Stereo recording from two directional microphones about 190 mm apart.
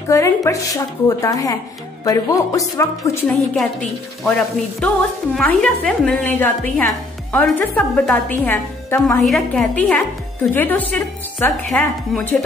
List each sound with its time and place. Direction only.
0.1 s speech: 15° left (ahead or behind)
4.7 s speech: 5° left (ahead or behind)
9.2 s speech: centre (ahead or behind)